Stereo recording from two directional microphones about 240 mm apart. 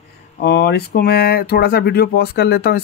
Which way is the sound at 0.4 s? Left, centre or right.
Left.